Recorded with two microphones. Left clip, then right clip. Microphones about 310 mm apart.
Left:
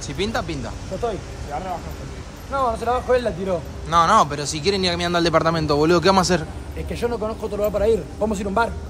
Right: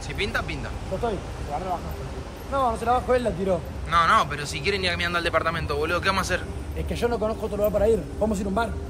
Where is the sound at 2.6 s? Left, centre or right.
Left.